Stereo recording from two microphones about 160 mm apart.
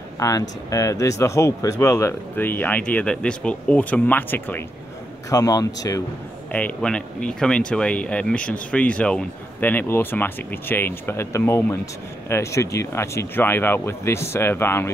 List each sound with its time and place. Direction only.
0.2 s speech: 20° left (ahead or behind)
5.3 s speech: 25° left (ahead or behind)
6.5 s speech: 10° left (ahead or behind)